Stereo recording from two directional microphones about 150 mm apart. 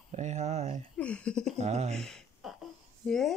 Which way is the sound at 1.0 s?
5° left (ahead or behind).